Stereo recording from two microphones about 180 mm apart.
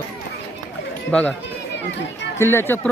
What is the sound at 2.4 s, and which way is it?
Speech, 15° left (ahead or behind).